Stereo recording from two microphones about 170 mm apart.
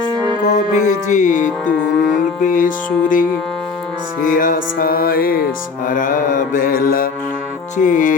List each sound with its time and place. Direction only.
0.4 s music: 45° left (ahead or behind)
4.3 s music: 55° left (ahead or behind)